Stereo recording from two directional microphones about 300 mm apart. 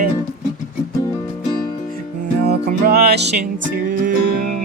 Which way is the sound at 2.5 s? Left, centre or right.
Right.